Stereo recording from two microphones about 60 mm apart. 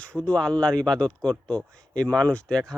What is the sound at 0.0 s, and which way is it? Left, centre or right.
Speech, centre.